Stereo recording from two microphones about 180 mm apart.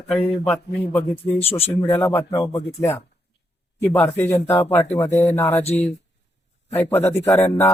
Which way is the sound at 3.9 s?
15° left (ahead or behind).